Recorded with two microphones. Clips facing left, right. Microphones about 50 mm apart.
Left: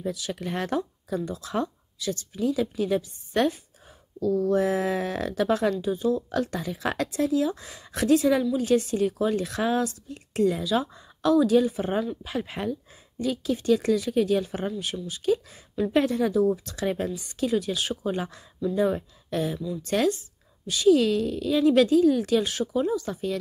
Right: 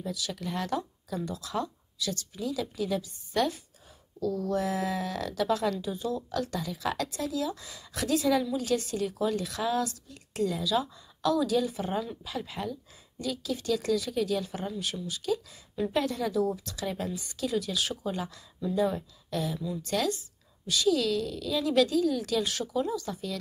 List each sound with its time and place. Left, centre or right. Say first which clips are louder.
0.0 s speech: left 4 dB; left
1.1 s speech: left 4 dB; centre
4.2 s speech: left 6 dB; centre
5.9 s speech: left 7 dB; centre
6.3 s speech: left 4 dB; left
16.7 s speech: left 6 dB; left
17.1 s speech: left 5 dB; centre